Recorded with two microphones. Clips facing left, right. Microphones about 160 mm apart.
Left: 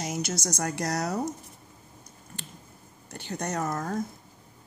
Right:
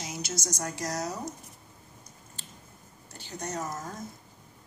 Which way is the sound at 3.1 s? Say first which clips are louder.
Left 4 dB; 65° left (ahead or behind).